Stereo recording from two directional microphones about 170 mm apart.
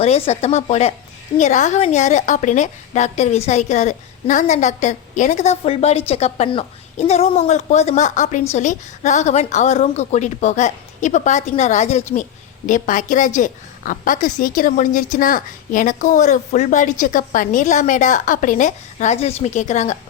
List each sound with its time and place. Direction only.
0.0 s a woman's voice: 40° left (ahead or behind)